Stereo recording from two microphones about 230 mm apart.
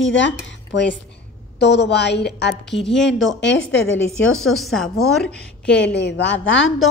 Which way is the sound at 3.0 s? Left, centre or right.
Left.